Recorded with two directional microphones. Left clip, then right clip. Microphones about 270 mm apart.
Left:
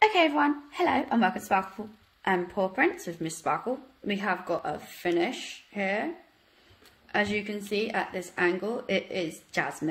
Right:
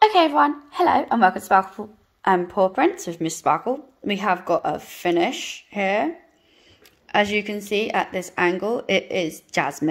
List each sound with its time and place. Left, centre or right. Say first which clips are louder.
0.0 s a woman's voice: right 7 dB; centre
7.1 s a woman's voice: right 8 dB; right